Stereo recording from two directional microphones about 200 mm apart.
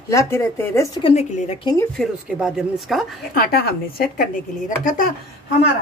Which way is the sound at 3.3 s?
50° left (ahead or behind).